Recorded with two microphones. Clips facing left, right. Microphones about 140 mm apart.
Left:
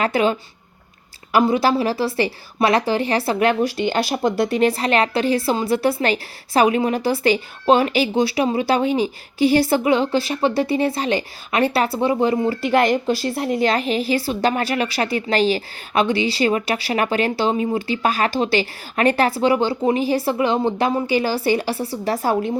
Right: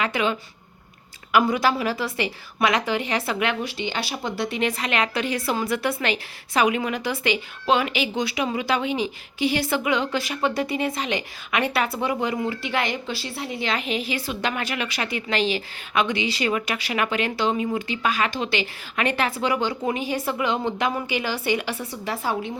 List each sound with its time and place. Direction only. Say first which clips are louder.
0.0 s a woman's voice: left 5 dB; 40° left (ahead or behind)